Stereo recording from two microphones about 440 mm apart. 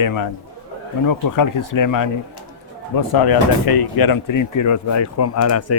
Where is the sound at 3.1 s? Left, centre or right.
Left.